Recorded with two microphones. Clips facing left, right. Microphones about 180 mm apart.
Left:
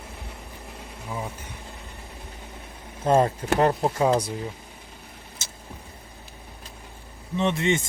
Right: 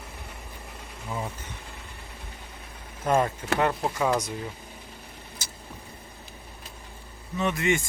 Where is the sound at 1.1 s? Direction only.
5° left (ahead or behind).